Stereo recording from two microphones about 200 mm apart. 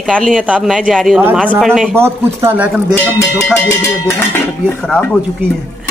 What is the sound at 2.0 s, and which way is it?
Speech, 10° right (ahead or behind).